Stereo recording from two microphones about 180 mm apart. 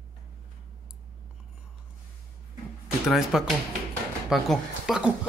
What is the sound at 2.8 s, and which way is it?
Music, centre (ahead or behind).